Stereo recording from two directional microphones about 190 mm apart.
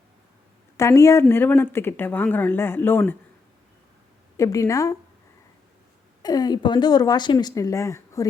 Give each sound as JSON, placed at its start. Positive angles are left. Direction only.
{"t": 0.8, "sound": "speech", "side_deg": 15}
{"t": 4.4, "sound": "speech", "side_deg": 15}
{"t": 6.2, "sound": "speech", "side_deg": 20}